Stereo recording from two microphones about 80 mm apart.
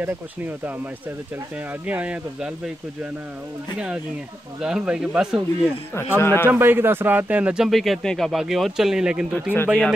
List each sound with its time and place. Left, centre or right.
1.9 s speech: centre
4.6 s speech: centre
5.9 s speech: left
6.5 s speech: right
7.7 s speech: centre
9.3 s speech: left